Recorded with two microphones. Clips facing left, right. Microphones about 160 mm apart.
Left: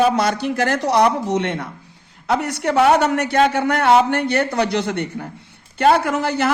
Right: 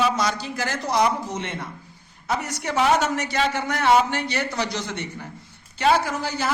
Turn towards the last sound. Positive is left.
turn(degrees=65)  # may be behind; listen again after turning